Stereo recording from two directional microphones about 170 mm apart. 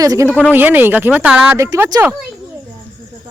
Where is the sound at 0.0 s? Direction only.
20° right (ahead or behind).